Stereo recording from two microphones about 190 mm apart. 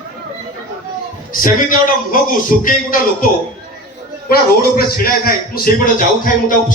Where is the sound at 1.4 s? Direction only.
45° left (ahead or behind).